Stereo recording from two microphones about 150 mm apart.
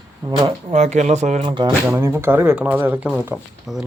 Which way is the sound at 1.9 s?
15° right (ahead or behind).